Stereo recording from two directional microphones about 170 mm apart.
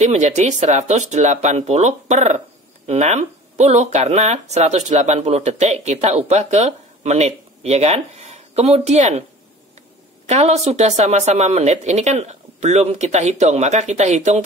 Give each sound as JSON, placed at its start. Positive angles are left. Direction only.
{"t": 0.0, "sound": "speech", "side_deg": -45}
{"t": 10.2, "sound": "speech", "side_deg": -40}